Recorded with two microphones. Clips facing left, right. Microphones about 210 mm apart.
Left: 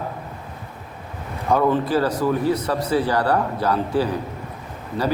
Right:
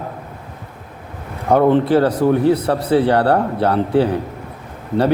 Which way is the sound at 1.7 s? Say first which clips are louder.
Right 6 dB; 60° right (ahead or behind).